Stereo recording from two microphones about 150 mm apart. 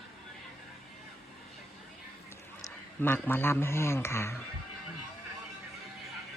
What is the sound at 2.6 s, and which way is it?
A man's voice, 15° left (ahead or behind).